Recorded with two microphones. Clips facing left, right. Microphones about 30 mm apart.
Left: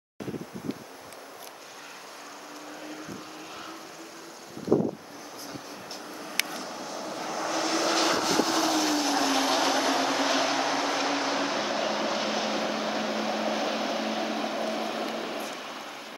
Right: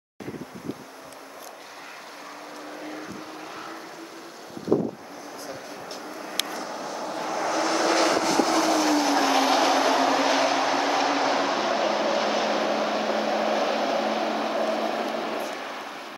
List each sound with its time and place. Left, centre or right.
6.4 s vehicle: centre
15.1 s vehicle: right